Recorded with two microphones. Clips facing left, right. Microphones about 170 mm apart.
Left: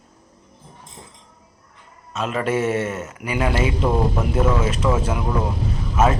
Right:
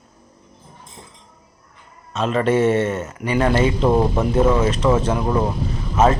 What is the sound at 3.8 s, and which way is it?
Speech, 30° right (ahead or behind).